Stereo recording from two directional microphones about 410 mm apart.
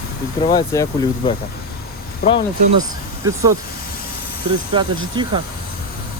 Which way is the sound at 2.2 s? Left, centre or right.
Left.